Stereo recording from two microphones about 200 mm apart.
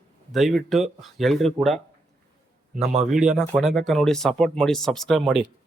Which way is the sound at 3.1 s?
5° right (ahead or behind).